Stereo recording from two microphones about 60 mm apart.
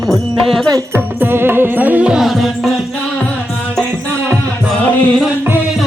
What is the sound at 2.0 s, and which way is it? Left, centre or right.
Music, centre.